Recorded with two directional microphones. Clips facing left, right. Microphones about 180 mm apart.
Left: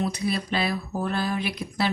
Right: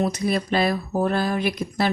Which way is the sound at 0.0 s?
45° right (ahead or behind).